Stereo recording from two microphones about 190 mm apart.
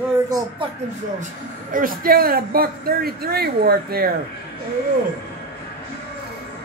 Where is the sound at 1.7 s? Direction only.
45° right (ahead or behind).